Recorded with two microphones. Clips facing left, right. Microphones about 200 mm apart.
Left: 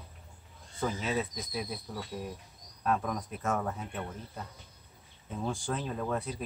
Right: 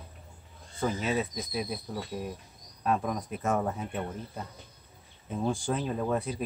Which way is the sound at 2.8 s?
15° right (ahead or behind).